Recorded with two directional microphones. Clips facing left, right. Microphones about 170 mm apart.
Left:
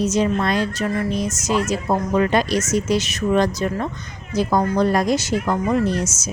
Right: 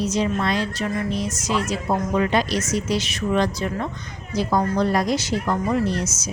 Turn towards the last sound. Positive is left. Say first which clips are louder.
# left 2 dB
turn(degrees=45)  # may be behind; listen again after turning